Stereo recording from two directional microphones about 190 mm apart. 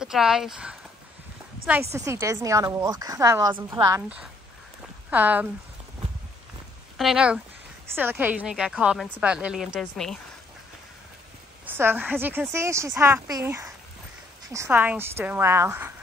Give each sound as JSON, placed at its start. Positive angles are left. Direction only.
{"t": 0.0, "sound": "a woman's voice", "side_deg": -5}
{"t": 7.0, "sound": "a woman's voice", "side_deg": -5}
{"t": 11.6, "sound": "a woman's voice", "side_deg": -10}